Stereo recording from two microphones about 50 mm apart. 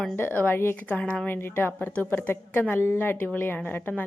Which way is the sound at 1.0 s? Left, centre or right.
Centre.